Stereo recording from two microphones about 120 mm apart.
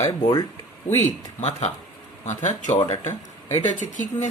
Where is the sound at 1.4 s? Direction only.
70° left (ahead or behind).